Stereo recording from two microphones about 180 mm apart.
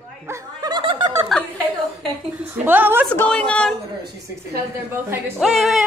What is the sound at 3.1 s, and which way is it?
Speech, 5° left (ahead or behind).